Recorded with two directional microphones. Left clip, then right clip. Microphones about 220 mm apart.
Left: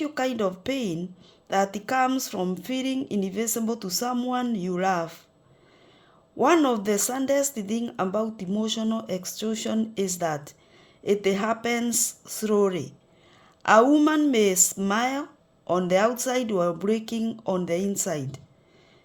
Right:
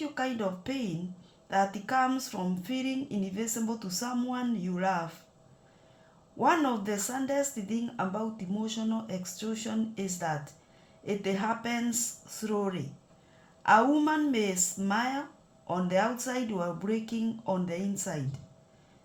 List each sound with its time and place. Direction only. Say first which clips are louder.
0.0 s speech: left 6 dB; 50° left (ahead or behind)
6.4 s speech: left 6 dB; 50° left (ahead or behind)